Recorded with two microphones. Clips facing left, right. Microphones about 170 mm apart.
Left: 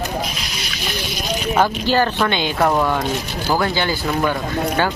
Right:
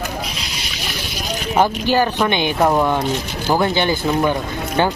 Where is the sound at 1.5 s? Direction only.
15° right (ahead or behind).